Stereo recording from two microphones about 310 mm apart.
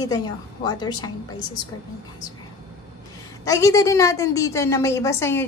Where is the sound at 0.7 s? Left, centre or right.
Centre.